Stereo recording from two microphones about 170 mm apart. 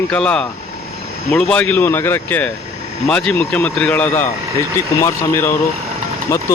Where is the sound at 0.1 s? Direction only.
5° left (ahead or behind).